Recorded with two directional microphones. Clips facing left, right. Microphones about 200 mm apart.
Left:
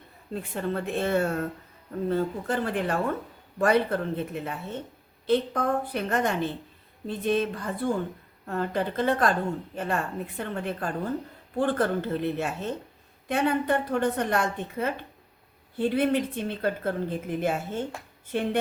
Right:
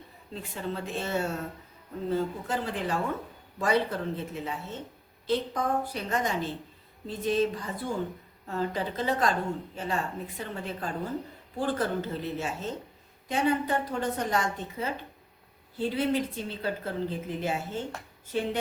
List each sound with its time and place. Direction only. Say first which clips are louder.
0.3 s a woman's voice: left 5 dB; 55° left (ahead or behind)